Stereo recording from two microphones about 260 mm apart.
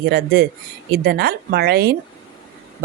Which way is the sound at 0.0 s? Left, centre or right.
Right.